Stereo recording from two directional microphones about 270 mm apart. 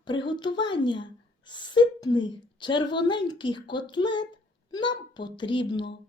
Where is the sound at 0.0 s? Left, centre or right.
Centre.